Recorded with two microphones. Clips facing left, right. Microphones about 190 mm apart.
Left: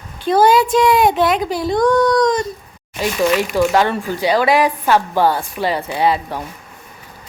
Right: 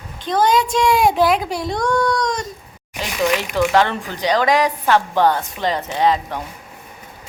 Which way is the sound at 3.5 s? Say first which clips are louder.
Left 2 dB; 10° left (ahead or behind).